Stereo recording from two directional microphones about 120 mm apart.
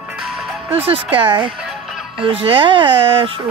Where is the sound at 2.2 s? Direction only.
45° right (ahead or behind).